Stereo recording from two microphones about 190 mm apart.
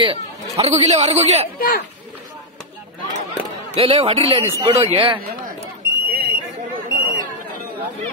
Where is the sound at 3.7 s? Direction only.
30° right (ahead or behind).